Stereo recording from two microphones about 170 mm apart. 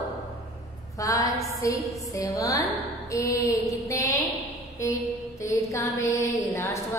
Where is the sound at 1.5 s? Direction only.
20° left (ahead or behind).